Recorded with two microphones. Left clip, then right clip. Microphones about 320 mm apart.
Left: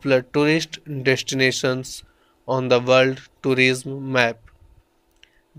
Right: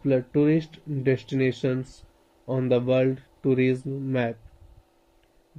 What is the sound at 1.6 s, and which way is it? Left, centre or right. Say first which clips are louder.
Speech: left 5 dB; left.